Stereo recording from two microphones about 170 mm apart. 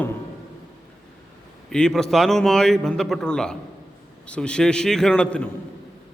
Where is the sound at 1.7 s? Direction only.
5° left (ahead or behind).